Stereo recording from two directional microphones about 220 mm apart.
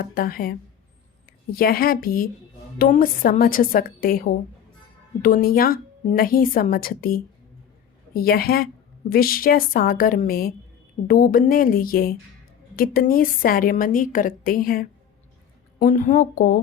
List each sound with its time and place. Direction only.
0.0 s a woman's voice: 40° left (ahead or behind)